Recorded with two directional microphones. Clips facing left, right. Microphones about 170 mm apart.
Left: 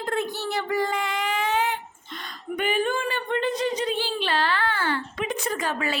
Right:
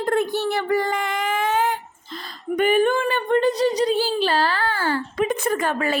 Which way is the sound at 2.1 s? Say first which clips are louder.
Right 6 dB; 35° right (ahead or behind).